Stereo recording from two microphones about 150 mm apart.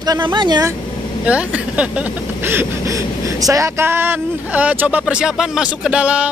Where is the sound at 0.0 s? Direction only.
30° right (ahead or behind).